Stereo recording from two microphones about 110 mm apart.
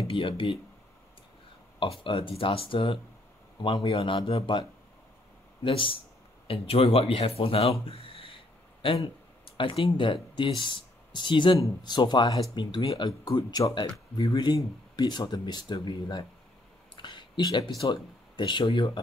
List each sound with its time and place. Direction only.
0.1 s speech: 50° left (ahead or behind)
1.8 s speech: 55° left (ahead or behind)
5.6 s speech: 50° left (ahead or behind)
7.8 s a sound: 60° left (ahead or behind)
8.8 s speech: 55° left (ahead or behind)